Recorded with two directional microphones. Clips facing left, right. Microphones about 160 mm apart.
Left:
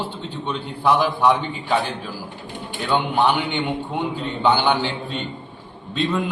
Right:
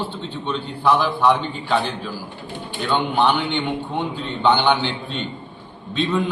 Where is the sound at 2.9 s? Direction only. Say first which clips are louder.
Even; 10° left (ahead or behind).